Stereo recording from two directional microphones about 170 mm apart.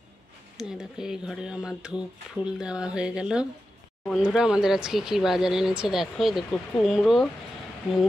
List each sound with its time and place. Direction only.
0.6 s speech: 5° right (ahead or behind)